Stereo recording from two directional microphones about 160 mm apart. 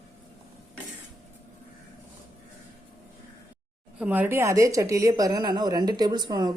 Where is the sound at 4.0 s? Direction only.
10° right (ahead or behind).